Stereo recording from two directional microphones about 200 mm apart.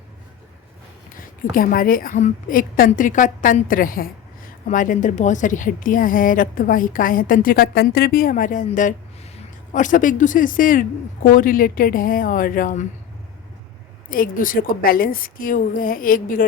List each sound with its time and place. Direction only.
1.1 s a woman's voice: 45° left (ahead or behind)
14.1 s a woman's voice: 45° left (ahead or behind)